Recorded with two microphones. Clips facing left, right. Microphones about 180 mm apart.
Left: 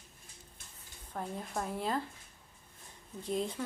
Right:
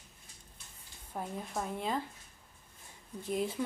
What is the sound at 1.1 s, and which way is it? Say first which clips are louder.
Speech: even; centre (ahead or behind).